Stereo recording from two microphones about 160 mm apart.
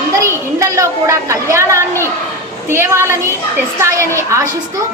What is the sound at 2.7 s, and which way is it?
A woman's voice, 15° right (ahead or behind).